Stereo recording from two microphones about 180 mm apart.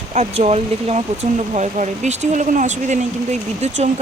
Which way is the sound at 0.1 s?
40° right (ahead or behind).